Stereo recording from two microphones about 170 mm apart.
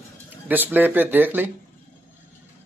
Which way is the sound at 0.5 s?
10° right (ahead or behind).